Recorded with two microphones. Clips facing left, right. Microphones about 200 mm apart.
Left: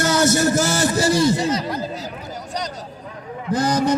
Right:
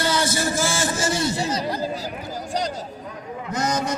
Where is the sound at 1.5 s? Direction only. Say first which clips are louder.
Left 3 dB; 30° right (ahead or behind).